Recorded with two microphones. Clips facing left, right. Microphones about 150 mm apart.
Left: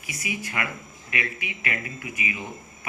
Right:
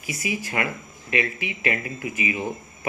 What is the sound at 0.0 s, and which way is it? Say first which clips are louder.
Speech: right 4 dB; 25° right (ahead or behind).